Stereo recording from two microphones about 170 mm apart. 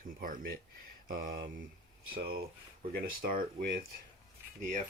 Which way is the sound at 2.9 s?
60° right (ahead or behind).